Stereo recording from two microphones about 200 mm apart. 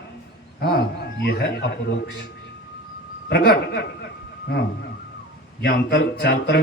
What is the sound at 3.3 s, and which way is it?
Speech, 55° left (ahead or behind).